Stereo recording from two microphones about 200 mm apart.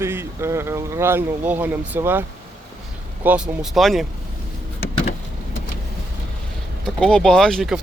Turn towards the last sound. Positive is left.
turn(degrees=0)  # may be behind; listen again after turning